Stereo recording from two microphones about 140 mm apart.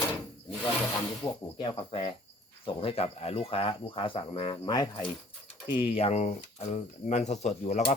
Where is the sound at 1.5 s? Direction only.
40° left (ahead or behind).